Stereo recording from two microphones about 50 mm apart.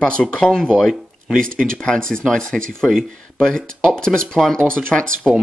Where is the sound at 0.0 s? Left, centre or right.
Left.